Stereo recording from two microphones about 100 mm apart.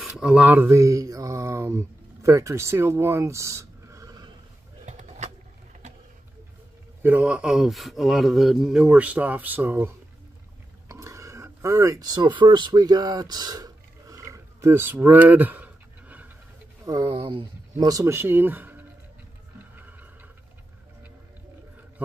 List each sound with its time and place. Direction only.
0.0 s speech: 10° right (ahead or behind); by 4.2 s 30° right (ahead or behind)
7.0 s speech: 15° right (ahead or behind)
10.9 s a sound: 30° right (ahead or behind)
16.8 s speech: 40° right (ahead or behind)
17.1 s speech: 60° right (ahead or behind)
17.7 s speech: 40° right (ahead or behind)
18.1 s speech: 20° right (ahead or behind)
19.7 s a sound: 15° right (ahead or behind)